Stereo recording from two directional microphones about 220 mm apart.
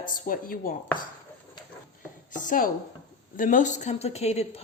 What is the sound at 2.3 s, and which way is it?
A woman's voice, 35° left (ahead or behind).